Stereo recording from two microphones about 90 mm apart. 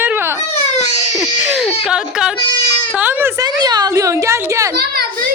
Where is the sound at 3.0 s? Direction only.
20° right (ahead or behind).